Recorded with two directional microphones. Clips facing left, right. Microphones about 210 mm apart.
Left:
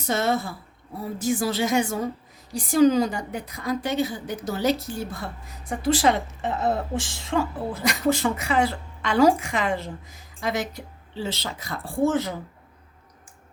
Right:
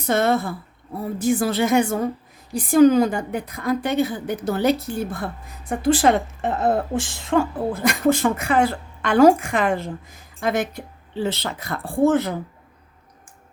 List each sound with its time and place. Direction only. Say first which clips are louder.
0.0 s a woman's voice: right 4 dB; 55° right (ahead or behind)